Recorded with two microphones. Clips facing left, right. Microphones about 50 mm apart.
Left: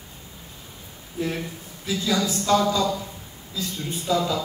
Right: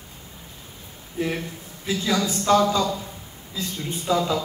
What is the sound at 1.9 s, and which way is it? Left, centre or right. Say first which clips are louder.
Speech: right 1 dB; right.